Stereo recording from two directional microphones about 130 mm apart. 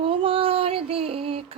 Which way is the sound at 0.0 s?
45° right (ahead or behind).